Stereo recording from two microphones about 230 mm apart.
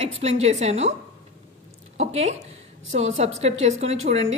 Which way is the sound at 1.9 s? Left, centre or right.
Right.